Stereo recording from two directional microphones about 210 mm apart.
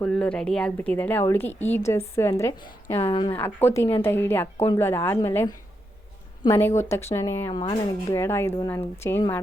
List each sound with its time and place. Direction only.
0.0 s a woman's voice: 5° left (ahead or behind); by 3.3 s 20° left (ahead or behind)
3.3 s a woman's voice: 10° left (ahead or behind)